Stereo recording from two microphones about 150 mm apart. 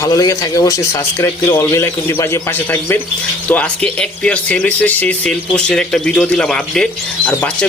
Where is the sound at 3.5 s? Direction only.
10° left (ahead or behind).